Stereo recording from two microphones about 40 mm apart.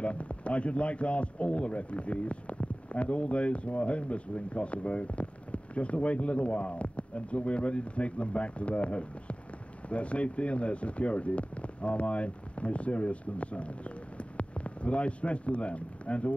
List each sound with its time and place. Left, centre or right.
0.0 s speech: left